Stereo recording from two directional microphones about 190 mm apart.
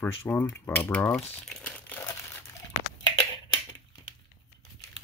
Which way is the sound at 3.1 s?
20° left (ahead or behind).